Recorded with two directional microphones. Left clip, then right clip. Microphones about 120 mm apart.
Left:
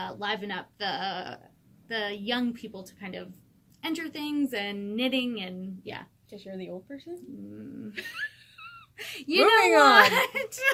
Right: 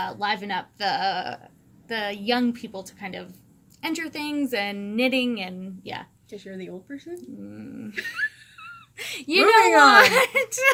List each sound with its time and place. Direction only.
0.0 s speech: 25° right (ahead or behind)
6.3 s speech: 15° left (ahead or behind)
7.9 s music: 15° left (ahead or behind)
9.0 s speech: 25° right (ahead or behind)
9.6 s speech: 15° left (ahead or behind)
9.9 s speech: 25° right (ahead or behind)